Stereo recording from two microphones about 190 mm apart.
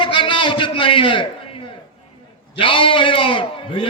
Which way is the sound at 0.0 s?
25° left (ahead or behind).